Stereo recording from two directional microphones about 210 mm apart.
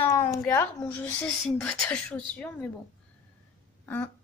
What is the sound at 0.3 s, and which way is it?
A woman's voice, 5° left (ahead or behind).